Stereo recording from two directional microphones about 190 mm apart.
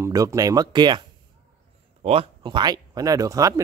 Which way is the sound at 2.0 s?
30° right (ahead or behind).